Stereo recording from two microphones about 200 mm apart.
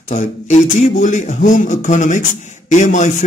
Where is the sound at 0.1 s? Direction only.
35° left (ahead or behind).